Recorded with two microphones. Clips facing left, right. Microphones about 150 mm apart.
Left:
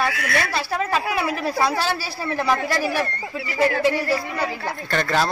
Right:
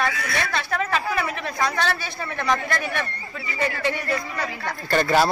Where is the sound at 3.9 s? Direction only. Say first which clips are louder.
Left 4 dB; 30° left (ahead or behind).